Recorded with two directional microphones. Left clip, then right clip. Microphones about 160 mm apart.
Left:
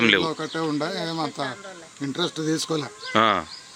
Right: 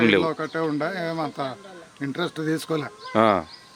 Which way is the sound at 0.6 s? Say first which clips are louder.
Even; 5° right (ahead or behind).